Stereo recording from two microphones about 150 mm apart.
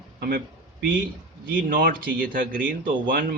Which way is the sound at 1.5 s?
70° right (ahead or behind).